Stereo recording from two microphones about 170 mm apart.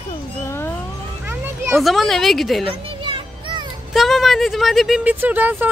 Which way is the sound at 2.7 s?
30° right (ahead or behind).